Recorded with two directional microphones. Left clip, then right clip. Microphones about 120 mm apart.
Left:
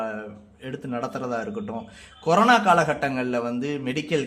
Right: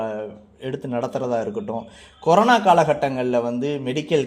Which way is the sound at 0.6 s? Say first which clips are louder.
Right 5 dB; 20° right (ahead or behind).